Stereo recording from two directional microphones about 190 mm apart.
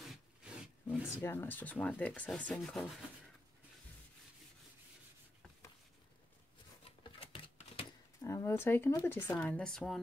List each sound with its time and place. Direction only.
0.0 s rub: centre (ahead or behind)
1.1 s speech: 10° left (ahead or behind)
6.8 s a sound: 30° left (ahead or behind)
8.3 s speech: 15° left (ahead or behind)